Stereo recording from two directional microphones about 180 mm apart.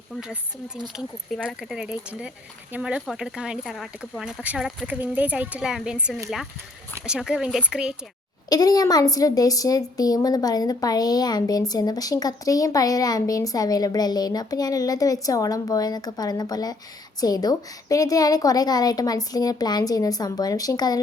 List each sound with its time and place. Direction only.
0.9 s speech: centre (ahead or behind)
8.4 s a woman's voice: 20° left (ahead or behind)